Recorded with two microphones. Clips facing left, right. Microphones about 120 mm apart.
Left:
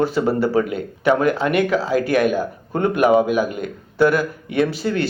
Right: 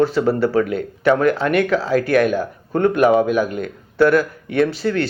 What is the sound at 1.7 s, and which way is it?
Speech, 5° left (ahead or behind).